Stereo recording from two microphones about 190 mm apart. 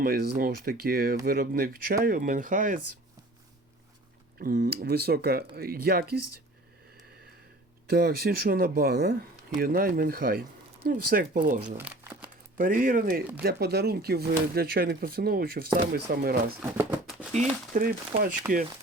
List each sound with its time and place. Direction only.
0.0 s speech: 50° right (ahead or behind)
4.4 s speech: 45° right (ahead or behind)
7.9 s speech: 55° right (ahead or behind)
11.9 s crumpling: 5° right (ahead or behind)
12.5 s speech: 45° right (ahead or behind)
16.6 s a sound: 10° right (ahead or behind)
17.3 s speech: 45° right (ahead or behind)